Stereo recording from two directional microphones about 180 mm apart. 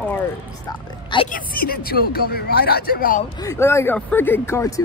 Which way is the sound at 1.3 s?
55° left (ahead or behind).